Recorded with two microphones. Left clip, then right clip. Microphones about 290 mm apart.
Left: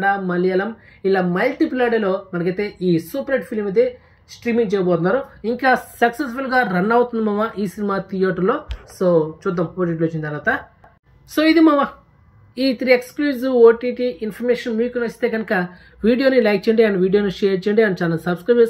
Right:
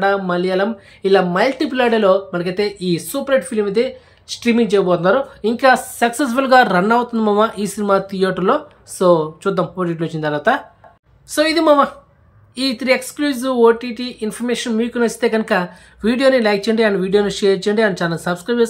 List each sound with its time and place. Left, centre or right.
0.0 s speech: right